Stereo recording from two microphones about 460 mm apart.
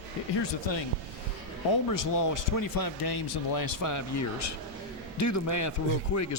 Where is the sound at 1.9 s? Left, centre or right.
Left.